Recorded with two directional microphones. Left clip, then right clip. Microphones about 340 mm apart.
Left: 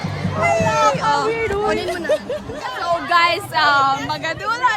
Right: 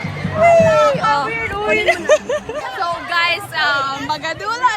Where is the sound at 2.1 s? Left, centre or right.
Right.